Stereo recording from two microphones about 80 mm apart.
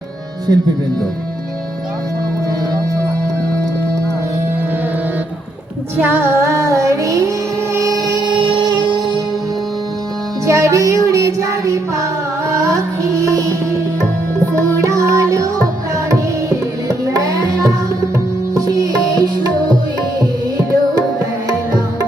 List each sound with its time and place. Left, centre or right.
6.0 s music: right
8.3 s music: right
10.4 s music: right
14.6 s music: right
20.1 s tabla: right